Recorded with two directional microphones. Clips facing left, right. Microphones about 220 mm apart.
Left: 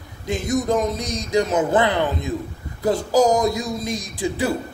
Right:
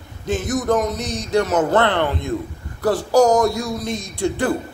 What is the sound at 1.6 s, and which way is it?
Speech, 10° left (ahead or behind).